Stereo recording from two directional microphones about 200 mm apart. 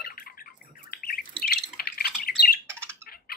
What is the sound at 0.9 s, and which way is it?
Bird, 50° left (ahead or behind).